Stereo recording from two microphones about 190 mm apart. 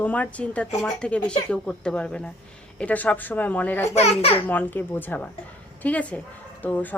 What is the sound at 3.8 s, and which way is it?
Speech, 35° left (ahead or behind).